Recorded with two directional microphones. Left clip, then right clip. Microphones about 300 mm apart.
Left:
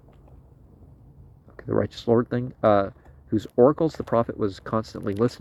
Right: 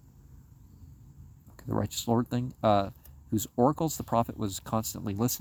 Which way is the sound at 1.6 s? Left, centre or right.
Centre.